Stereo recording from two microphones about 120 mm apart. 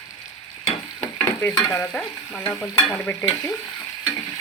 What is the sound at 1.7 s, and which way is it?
Frying, 15° left (ahead or behind).